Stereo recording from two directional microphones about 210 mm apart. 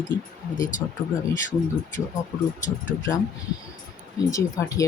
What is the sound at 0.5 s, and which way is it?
Speech, 40° left (ahead or behind).